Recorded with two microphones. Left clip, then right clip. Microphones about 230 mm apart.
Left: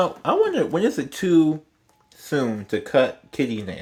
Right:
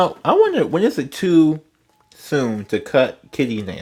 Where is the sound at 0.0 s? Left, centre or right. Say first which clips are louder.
Right 5 dB; right.